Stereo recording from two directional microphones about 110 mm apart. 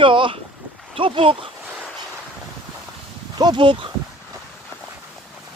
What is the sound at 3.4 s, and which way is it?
Speech, 45° right (ahead or behind).